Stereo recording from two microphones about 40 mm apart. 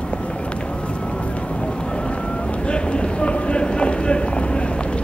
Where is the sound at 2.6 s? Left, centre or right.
Left.